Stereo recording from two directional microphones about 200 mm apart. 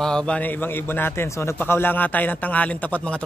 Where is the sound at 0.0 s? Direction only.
5° left (ahead or behind).